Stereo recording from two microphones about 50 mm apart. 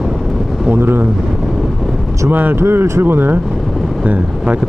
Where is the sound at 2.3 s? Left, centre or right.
Right.